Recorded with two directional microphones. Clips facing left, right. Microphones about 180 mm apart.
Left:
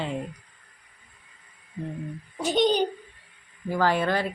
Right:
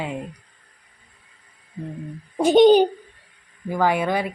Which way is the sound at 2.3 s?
50° right (ahead or behind).